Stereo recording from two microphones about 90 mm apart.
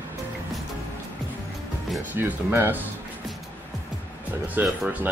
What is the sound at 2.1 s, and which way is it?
Speech, 25° right (ahead or behind).